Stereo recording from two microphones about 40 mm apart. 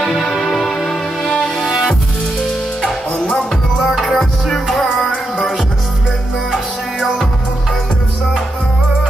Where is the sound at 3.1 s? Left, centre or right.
Left.